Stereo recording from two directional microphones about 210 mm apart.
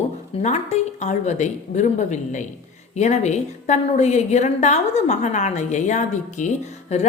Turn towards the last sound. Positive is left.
turn(degrees=35)  # may be behind; listen again after turning